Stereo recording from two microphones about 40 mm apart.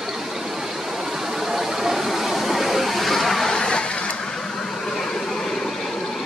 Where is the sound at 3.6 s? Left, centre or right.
Left.